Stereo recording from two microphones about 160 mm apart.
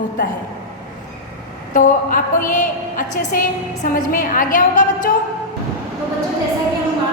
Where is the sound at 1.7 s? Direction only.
55° left (ahead or behind).